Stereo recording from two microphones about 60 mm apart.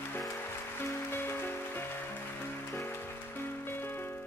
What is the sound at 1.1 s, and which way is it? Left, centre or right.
Music, left.